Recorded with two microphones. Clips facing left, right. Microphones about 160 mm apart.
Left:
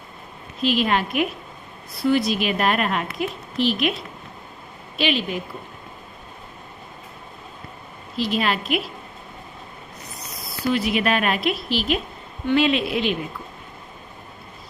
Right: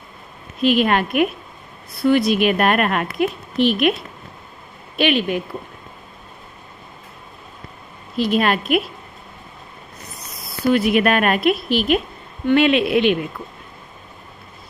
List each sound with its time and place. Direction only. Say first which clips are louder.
0.6 s a woman's voice: right 4 dB; 55° right (ahead or behind)
4.9 s a woman's voice: right 5 dB; 55° right (ahead or behind)
8.1 s a woman's voice: right 5 dB; 50° right (ahead or behind)
10.7 s a woman's voice: right 5 dB; 55° right (ahead or behind)